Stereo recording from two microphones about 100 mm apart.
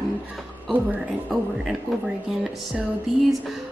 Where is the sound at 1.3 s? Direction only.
5° right (ahead or behind).